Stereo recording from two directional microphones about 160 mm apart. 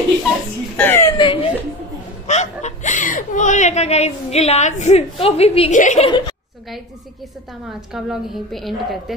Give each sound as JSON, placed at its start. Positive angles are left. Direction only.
{"t": 0.7, "sound": "speech", "side_deg": 15}
{"t": 1.1, "sound": "speech", "side_deg": 30}
{"t": 2.2, "sound": "speech", "side_deg": 45}
{"t": 5.8, "sound": "speech", "side_deg": 50}
{"t": 6.0, "sound": "a woman's voice", "side_deg": 30}
{"t": 7.9, "sound": "a woman's voice", "side_deg": 0}